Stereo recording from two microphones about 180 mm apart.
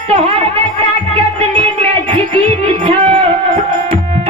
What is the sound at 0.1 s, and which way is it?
Speech, 30° right (ahead or behind).